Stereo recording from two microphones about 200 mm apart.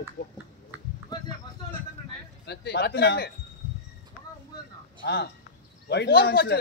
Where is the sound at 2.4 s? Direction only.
55° left (ahead or behind).